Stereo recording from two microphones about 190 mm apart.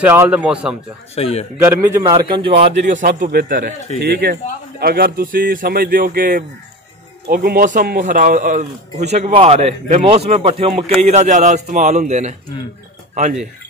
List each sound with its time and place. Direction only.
0.0 s speech: 10° right (ahead or behind)
1.1 s a man's voice: 35° left (ahead or behind)
1.6 s a man's voice: 15° right (ahead or behind)
2.6 s a man's voice: 40° right (ahead or behind)